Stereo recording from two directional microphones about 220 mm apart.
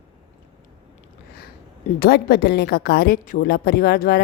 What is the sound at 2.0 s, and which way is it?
A woman's voice, 45° left (ahead or behind).